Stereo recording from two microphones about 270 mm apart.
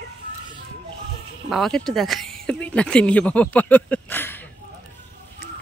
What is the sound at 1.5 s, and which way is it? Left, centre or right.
Speech, centre.